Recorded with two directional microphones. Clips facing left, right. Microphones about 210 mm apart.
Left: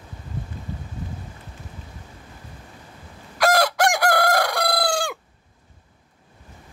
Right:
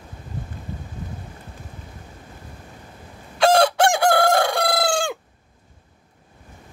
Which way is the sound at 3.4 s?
30° right (ahead or behind).